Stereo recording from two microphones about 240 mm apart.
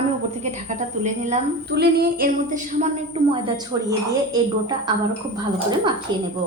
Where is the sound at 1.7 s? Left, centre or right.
Right.